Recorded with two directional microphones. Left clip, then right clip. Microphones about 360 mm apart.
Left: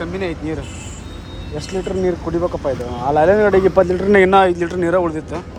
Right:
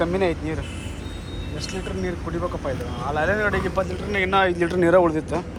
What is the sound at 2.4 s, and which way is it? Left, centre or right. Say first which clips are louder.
Speech: left 7 dB; centre.